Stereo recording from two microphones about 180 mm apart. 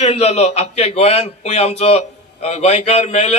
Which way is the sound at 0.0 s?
35° left (ahead or behind).